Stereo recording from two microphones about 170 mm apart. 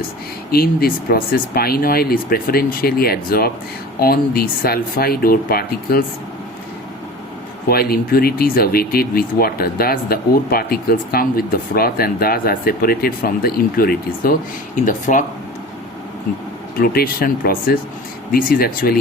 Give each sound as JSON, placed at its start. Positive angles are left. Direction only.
{"t": 0.5, "sound": "speech", "side_deg": 65}
{"t": 7.7, "sound": "speech", "side_deg": 65}
{"t": 14.8, "sound": "speech", "side_deg": 50}
{"t": 16.8, "sound": "speech", "side_deg": 60}